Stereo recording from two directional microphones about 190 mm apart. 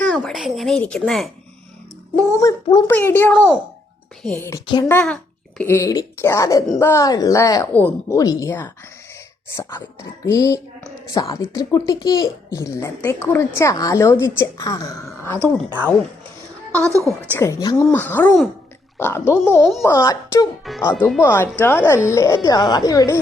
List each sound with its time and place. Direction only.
0.0 s speech: 5° left (ahead or behind)
2.3 s speech: 20° left (ahead or behind)
2.9 s a child's voice: 10° left (ahead or behind)
4.9 s a child's voice: 5° left (ahead or behind)
16.9 s a woman's voice: 15° right (ahead or behind)
17.2 s a child's voice: 15° left (ahead or behind)